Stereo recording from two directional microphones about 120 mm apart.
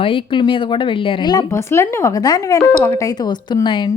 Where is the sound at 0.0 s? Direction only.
45° left (ahead or behind).